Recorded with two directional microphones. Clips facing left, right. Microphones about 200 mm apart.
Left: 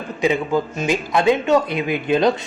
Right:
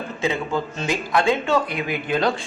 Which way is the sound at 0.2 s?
15° left (ahead or behind).